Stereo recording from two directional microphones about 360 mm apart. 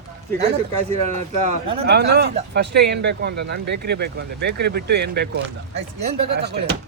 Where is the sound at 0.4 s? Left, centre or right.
Centre.